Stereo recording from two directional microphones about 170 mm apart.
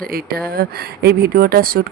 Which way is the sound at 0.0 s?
60° right (ahead or behind).